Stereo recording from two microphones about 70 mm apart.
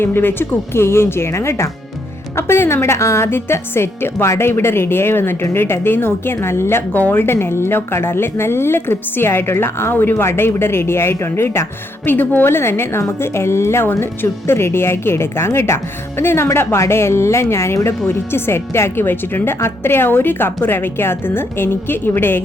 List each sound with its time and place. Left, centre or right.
0.0 s speech: left
12.0 s speech: left